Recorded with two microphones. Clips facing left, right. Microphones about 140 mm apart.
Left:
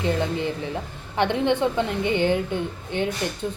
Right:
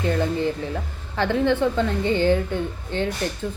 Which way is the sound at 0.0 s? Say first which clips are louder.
Right 2 dB; 20° left (ahead or behind).